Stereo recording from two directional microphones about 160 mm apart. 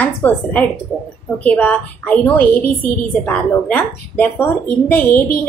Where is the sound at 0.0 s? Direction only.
10° left (ahead or behind).